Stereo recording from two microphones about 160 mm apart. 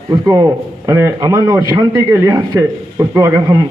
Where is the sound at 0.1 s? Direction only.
20° right (ahead or behind).